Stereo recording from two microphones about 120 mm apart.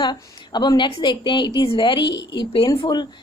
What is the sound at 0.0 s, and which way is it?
A woman's voice, 35° left (ahead or behind).